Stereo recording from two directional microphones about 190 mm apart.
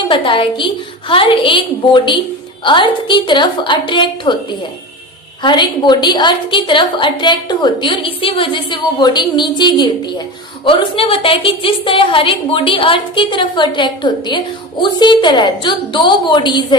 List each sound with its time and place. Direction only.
0.1 s a woman's voice: 25° left (ahead or behind)
5.4 s a woman's voice: 25° left (ahead or behind)